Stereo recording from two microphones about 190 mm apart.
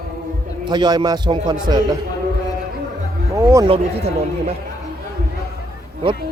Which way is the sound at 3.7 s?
35° right (ahead or behind).